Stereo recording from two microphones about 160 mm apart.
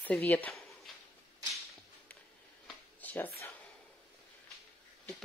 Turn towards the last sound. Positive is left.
turn(degrees=10)  # may be behind; listen again after turning